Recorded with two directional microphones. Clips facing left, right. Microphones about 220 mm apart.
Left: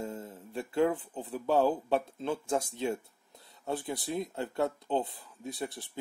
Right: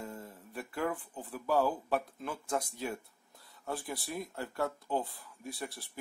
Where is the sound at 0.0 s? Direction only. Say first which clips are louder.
Left 5 dB; 25° left (ahead or behind).